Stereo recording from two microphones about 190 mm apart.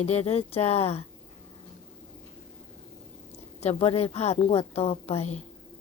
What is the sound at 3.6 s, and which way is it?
A woman's voice, 30° left (ahead or behind).